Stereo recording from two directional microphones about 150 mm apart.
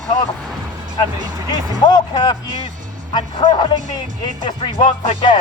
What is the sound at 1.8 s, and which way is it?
Speech, 30° left (ahead or behind).